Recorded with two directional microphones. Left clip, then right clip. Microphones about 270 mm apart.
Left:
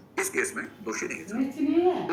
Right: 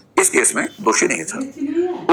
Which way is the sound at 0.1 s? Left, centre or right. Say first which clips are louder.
Right 12 dB; centre.